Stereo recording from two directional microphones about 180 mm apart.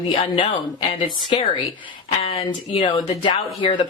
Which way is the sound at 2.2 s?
30° left (ahead or behind).